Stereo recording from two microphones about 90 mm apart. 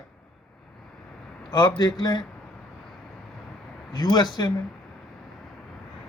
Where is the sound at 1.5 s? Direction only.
50° left (ahead or behind).